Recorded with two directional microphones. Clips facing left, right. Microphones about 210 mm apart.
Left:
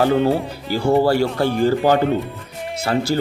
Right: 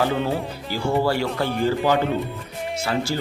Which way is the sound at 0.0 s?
45° left (ahead or behind).